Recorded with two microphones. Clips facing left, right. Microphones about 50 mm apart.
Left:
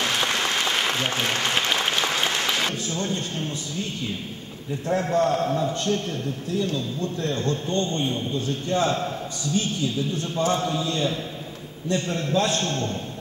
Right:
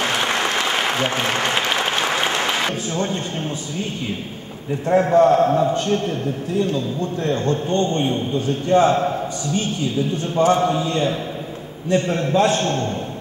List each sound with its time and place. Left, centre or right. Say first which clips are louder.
0.0 s applause: right 4 dB; right
4.8 s a man's voice: right 8 dB; right